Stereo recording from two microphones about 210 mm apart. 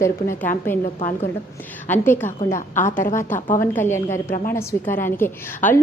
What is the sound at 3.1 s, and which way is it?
A woman's voice, 10° left (ahead or behind).